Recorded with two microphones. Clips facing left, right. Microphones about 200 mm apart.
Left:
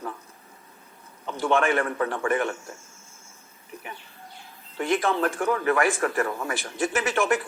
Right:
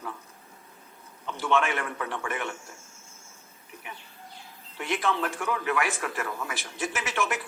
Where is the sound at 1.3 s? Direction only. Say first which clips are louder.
Left 4 dB; 45° left (ahead or behind).